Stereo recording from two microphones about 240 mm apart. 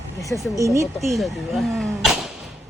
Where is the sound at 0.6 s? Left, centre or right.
Centre.